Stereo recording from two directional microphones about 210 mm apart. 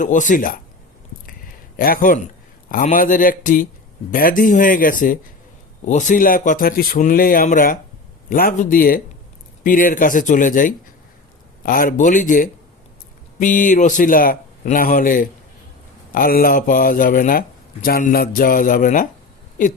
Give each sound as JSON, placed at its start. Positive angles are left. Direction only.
{"t": 0.0, "sound": "a man's voice", "side_deg": 35}
{"t": 1.3, "sound": "a sound", "side_deg": 45}
{"t": 2.6, "sound": "a man's voice", "side_deg": 40}